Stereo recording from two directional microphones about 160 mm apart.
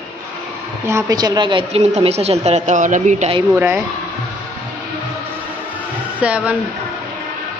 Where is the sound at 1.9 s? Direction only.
40° right (ahead or behind).